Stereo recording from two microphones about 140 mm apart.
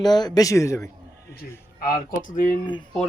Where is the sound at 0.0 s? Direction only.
30° left (ahead or behind).